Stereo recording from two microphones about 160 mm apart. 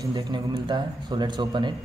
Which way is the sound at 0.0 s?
25° right (ahead or behind).